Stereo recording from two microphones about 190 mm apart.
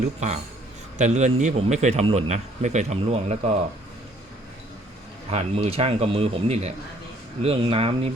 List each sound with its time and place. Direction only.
0.0 s speech: 35° right (ahead or behind)
5.3 s speech: 35° right (ahead or behind)